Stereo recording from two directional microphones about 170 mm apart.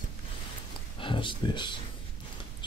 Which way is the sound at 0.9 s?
30° left (ahead or behind).